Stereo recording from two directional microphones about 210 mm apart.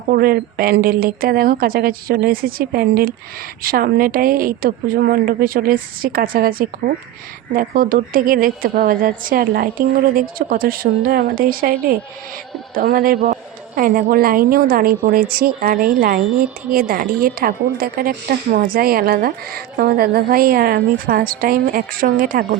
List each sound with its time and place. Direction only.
0.1 s a woman's voice: 45° right (ahead or behind)